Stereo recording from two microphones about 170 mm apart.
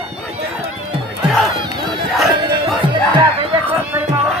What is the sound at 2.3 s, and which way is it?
Music, 25° right (ahead or behind).